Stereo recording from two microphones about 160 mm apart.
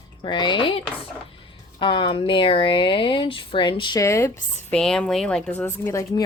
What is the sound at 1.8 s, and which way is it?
Speech, 30° left (ahead or behind).